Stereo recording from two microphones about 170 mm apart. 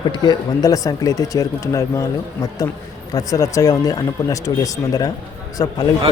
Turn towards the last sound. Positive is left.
turn(degrees=20)  # may be behind; listen again after turning